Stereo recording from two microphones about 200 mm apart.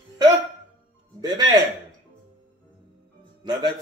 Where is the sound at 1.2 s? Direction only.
20° right (ahead or behind).